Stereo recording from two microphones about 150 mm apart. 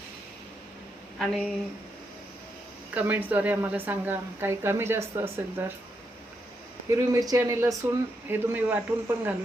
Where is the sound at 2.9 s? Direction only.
10° right (ahead or behind).